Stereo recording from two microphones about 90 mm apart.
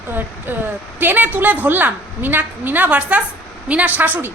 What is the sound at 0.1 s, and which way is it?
A woman's voice, 20° right (ahead or behind).